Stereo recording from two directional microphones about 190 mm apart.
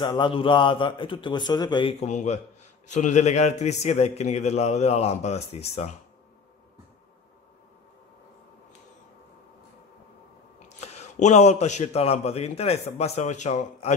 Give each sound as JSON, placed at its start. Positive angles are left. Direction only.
{"t": 0.0, "sound": "a man's voice", "side_deg": 25}
{"t": 10.8, "sound": "a man's voice", "side_deg": 35}